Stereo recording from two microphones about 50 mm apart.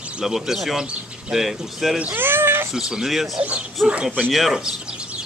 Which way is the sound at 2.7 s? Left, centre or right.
Centre.